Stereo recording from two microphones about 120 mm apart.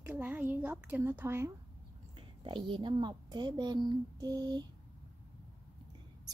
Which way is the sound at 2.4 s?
40° right (ahead or behind).